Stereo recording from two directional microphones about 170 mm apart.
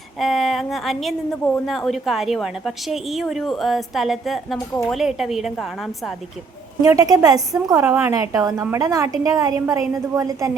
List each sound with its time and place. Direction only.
0.2 s a woman's voice: centre (ahead or behind)
6.8 s a woman's voice: 20° right (ahead or behind)